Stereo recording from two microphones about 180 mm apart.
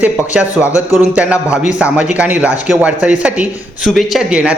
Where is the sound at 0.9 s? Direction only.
5° right (ahead or behind).